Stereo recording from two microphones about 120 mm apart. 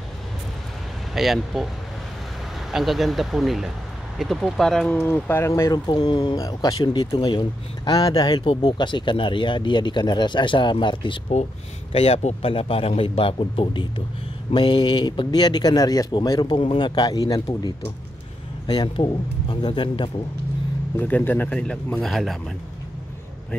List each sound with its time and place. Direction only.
1.1 s speech: centre (ahead or behind)
2.7 s speech: centre (ahead or behind); by 5.5 s 15° left (ahead or behind)
5.5 s speech: 30° left (ahead or behind); by 11.3 s 45° left (ahead or behind)
11.9 s a man's voice: 55° left (ahead or behind)
12.4 s a man's voice: 50° left (ahead or behind); by 17.4 s 30° left (ahead or behind)
18.7 s speech: 35° left (ahead or behind)
20.9 s speech: 15° left (ahead or behind)